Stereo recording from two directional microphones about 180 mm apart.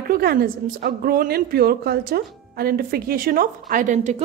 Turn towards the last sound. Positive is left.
turn(degrees=-40)  # may be behind; listen again after turning